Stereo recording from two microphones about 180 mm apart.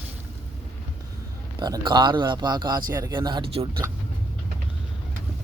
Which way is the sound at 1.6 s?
25° right (ahead or behind).